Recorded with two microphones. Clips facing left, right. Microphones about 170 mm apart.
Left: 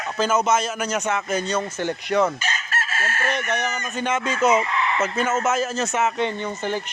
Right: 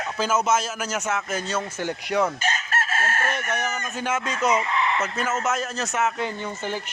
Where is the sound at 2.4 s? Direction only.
50° right (ahead or behind).